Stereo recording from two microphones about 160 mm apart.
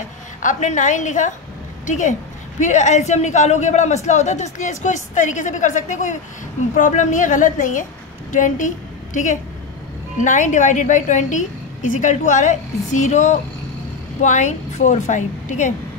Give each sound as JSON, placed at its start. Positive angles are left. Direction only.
{"t": 0.4, "sound": "a man's voice", "side_deg": 50}